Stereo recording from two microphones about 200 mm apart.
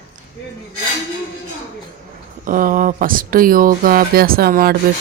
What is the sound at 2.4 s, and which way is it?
Speech, 45° right (ahead or behind).